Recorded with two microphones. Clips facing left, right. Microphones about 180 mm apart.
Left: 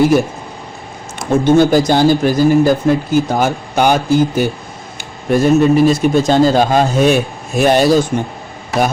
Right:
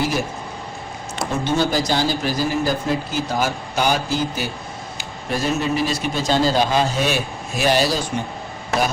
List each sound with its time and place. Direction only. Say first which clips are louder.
1.3 s speech: left 11 dB; 50° left (ahead or behind)